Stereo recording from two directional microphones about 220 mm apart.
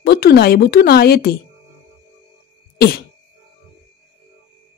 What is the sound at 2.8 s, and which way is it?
Sneeze, 45° left (ahead or behind).